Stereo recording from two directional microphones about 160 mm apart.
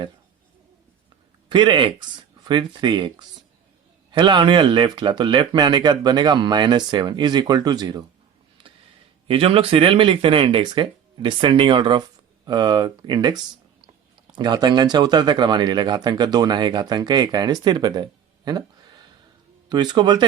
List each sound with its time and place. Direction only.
1.5 s speech: 30° right (ahead or behind)
9.2 s speech: 35° right (ahead or behind)
19.6 s speech: 25° right (ahead or behind)